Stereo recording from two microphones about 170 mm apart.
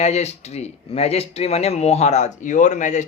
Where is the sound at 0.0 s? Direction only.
40° left (ahead or behind).